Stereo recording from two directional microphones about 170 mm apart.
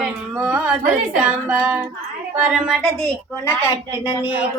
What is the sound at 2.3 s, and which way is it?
Speech, centre (ahead or behind).